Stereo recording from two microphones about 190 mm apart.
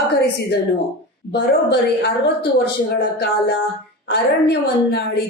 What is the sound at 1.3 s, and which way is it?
A woman's voice, 60° left (ahead or behind).